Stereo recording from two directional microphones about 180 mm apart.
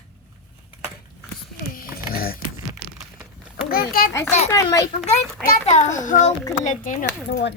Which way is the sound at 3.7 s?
55° left (ahead or behind).